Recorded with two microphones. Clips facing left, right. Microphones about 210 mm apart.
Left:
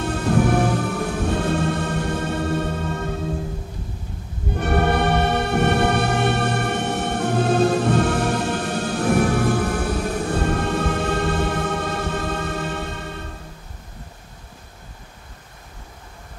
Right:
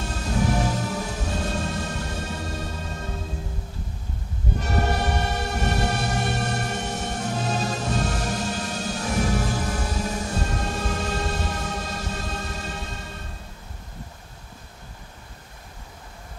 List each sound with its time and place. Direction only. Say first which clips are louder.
0.0 s music: left 7 dB; 60° left (ahead or behind)
4.6 s music: left 6 dB; 60° left (ahead or behind)